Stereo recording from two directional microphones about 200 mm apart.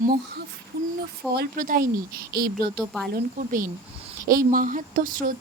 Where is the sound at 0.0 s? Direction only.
45° right (ahead or behind).